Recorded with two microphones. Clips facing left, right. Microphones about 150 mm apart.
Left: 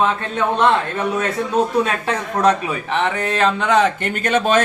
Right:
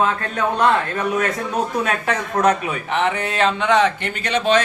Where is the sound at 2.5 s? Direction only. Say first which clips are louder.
Left 1 dB; 35° left (ahead or behind).